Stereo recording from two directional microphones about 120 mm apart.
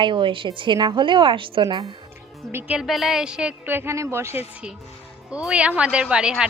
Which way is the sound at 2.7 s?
Centre (ahead or behind).